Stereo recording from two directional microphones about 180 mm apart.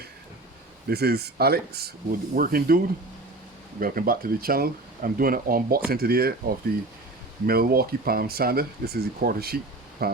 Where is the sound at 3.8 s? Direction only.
55° right (ahead or behind).